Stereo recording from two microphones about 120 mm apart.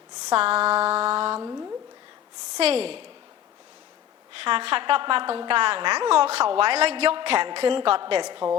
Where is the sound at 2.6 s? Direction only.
55° right (ahead or behind).